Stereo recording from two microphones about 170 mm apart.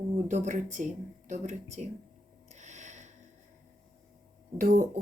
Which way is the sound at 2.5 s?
45° right (ahead or behind).